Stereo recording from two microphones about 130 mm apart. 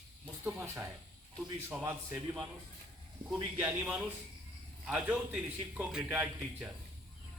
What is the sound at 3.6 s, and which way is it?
Speech, 10° right (ahead or behind).